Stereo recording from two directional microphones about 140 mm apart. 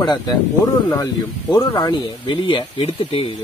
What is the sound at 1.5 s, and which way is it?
Speech, 30° left (ahead or behind).